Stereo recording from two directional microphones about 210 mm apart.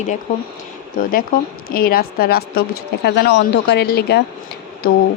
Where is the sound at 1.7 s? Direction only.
45° left (ahead or behind).